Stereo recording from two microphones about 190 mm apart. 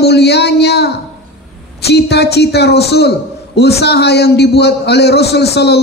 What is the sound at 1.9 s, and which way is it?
A man's voice, 60° left (ahead or behind).